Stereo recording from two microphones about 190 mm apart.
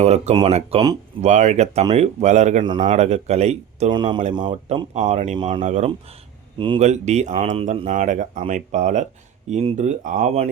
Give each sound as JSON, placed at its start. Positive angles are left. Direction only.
{"t": 0.0, "sound": "speech", "side_deg": -35}
{"t": 3.9, "sound": "speech", "side_deg": -25}
{"t": 4.9, "sound": "speech", "side_deg": -40}